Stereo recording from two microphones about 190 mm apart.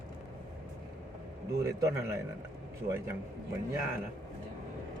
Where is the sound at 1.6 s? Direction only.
15° right (ahead or behind).